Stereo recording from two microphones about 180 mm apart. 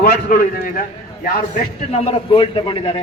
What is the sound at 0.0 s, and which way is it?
A man's voice, 55° left (ahead or behind).